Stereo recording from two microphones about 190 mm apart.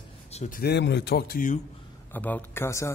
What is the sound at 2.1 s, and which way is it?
Speech, 10° left (ahead or behind).